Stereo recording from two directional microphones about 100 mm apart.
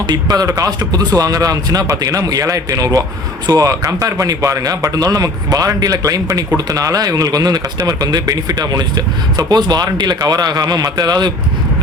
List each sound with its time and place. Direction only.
0.1 s a man's voice: 40° right (ahead or behind)